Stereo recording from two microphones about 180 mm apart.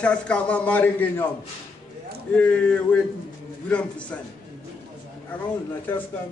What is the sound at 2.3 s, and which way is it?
Speech, 5° left (ahead or behind).